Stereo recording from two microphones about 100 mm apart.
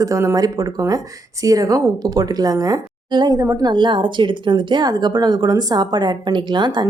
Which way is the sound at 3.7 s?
50° right (ahead or behind).